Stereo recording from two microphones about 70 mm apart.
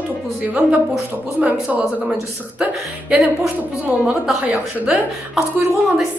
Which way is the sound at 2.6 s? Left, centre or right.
Centre.